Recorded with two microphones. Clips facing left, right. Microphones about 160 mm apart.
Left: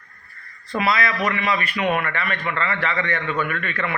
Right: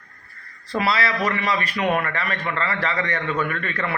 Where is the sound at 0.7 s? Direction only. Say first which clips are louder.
Even; 30° right (ahead or behind).